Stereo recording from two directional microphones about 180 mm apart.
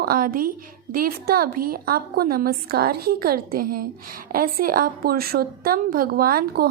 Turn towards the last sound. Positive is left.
turn(degrees=-55)  # may be behind; listen again after turning